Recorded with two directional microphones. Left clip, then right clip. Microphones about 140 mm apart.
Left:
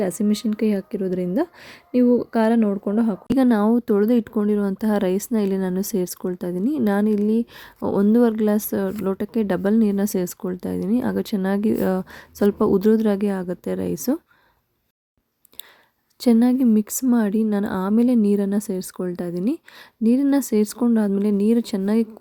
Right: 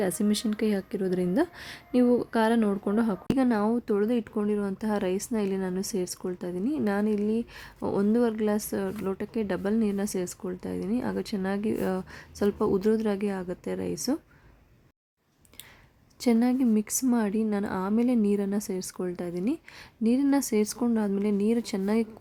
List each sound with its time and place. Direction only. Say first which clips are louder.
0.0 s a woman's voice: left 5 dB; 20° left (ahead or behind)
3.3 s speech: left 8 dB; 40° left (ahead or behind)
16.2 s a woman's voice: left 7 dB; 35° left (ahead or behind)